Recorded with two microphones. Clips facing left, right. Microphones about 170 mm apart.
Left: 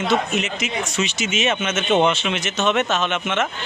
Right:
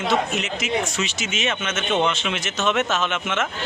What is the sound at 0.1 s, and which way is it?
A man's voice, centre (ahead or behind).